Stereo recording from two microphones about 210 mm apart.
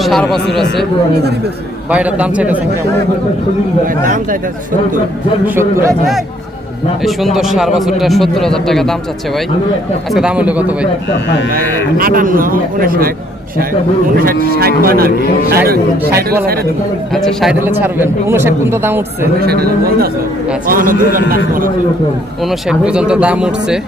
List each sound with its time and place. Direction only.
0.0 s speech: centre (ahead or behind)
1.9 s a man's voice: 5° right (ahead or behind)
3.8 s a man's voice: 40° right (ahead or behind)
5.5 s a man's voice: 15° right (ahead or behind)
7.3 s speech: centre (ahead or behind)
10.1 s a man's voice: 5° right (ahead or behind)
11.5 s a man's voice: 45° right (ahead or behind)
14.2 s a man's voice: 45° right (ahead or behind)
17.2 s a man's voice: centre (ahead or behind)
19.4 s a man's voice: 50° right (ahead or behind)
22.4 s speech: 5° right (ahead or behind)